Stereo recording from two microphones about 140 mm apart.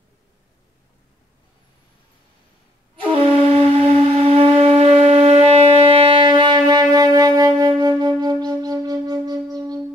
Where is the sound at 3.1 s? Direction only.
40° right (ahead or behind).